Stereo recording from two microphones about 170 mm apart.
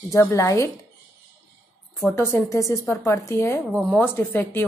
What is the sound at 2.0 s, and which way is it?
Speech, 15° left (ahead or behind).